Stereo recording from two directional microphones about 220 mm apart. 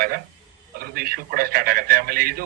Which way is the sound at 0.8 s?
45° right (ahead or behind).